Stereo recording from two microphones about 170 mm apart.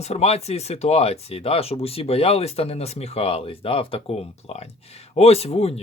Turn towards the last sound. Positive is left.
turn(degrees=35)  # may be behind; listen again after turning